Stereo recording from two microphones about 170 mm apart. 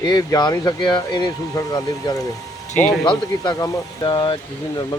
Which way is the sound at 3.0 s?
20° left (ahead or behind).